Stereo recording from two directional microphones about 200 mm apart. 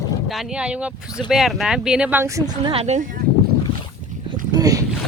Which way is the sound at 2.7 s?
35° right (ahead or behind).